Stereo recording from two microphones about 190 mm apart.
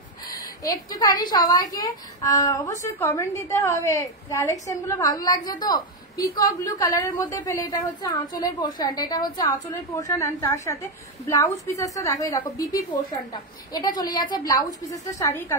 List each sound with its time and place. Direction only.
0.7 s a woman's voice: 20° left (ahead or behind)